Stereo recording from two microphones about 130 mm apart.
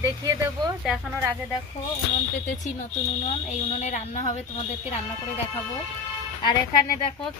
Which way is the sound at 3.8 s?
65° left (ahead or behind).